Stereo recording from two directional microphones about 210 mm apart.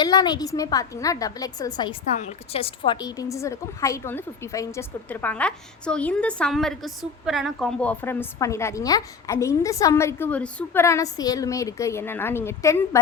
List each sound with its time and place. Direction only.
0.0 s a woman's voice: 20° left (ahead or behind)
2.1 s a woman's voice: 30° left (ahead or behind); by 13.0 s 15° left (ahead or behind)